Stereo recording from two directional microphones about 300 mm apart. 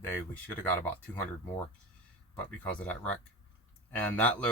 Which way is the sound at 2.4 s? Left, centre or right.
Centre.